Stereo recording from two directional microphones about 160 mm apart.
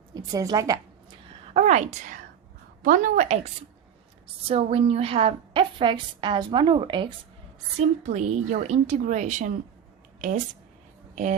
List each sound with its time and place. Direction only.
0.1 s a woman's voice: 20° right (ahead or behind)
1.5 s a woman's voice: 45° right (ahead or behind)
4.4 s a woman's voice: 40° right (ahead or behind)
7.8 s a woman's voice: 45° right (ahead or behind)